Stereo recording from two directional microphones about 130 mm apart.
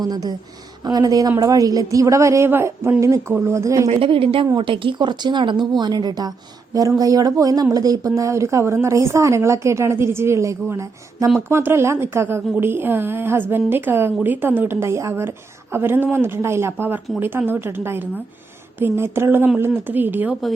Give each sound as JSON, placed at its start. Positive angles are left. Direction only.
{"t": 0.0, "sound": "speech", "side_deg": -30}
{"t": 3.8, "sound": "a woman's voice", "side_deg": -50}